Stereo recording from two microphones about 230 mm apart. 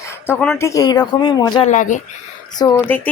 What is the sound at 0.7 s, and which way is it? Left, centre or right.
Speech, centre.